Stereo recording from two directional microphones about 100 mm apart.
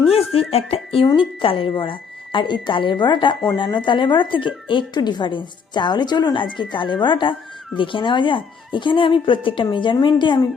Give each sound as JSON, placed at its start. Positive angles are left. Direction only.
{"t": 0.5, "sound": "speech", "side_deg": 75}
{"t": 1.1, "sound": "speech", "side_deg": 60}